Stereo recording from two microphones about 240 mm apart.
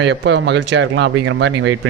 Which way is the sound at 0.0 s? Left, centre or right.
Right.